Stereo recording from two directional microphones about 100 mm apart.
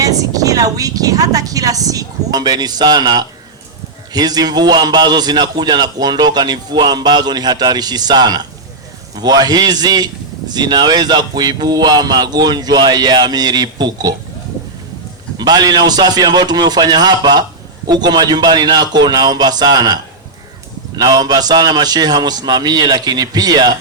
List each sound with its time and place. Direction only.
0.0 s a woman's voice: 35° right (ahead or behind)
15.4 s a man's voice: 45° right (ahead or behind)